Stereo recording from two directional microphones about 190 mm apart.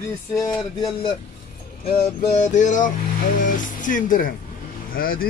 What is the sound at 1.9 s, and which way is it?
Music, 35° left (ahead or behind).